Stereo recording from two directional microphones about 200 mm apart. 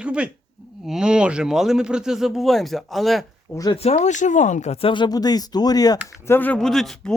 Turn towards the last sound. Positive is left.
turn(degrees=0)  # may be behind; listen again after turning